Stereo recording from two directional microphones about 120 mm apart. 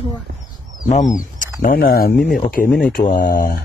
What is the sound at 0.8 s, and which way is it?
Speech, 90° left.